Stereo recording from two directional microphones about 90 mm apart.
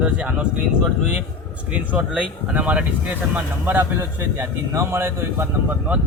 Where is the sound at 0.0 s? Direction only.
10° right (ahead or behind); by 5.7 s 25° right (ahead or behind).